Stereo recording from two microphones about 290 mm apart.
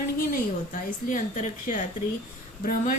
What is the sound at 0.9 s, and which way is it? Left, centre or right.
Speech, left.